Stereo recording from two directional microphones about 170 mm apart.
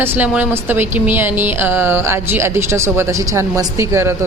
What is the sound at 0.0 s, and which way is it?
A woman's voice, 10° right (ahead or behind).